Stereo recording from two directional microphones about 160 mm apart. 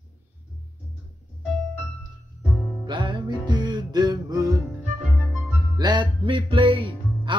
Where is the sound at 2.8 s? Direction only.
30° right (ahead or behind).